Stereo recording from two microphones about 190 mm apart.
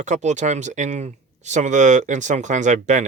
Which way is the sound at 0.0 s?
40° right (ahead or behind).